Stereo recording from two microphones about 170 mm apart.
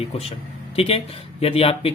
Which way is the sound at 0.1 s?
35° left (ahead or behind).